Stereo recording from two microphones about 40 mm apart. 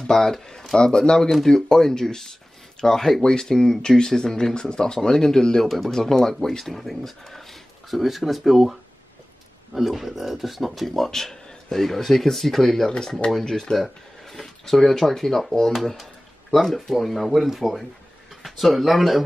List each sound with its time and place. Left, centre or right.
0.0 s speech: centre
6.6 s speech: centre
9.8 s speech: centre
15.7 s a sound: centre
16.7 s speech: centre